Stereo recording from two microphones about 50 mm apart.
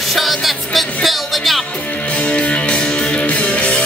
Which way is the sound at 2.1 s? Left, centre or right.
Left.